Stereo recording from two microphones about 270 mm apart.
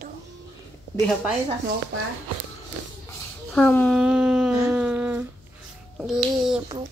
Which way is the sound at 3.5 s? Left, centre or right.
Centre.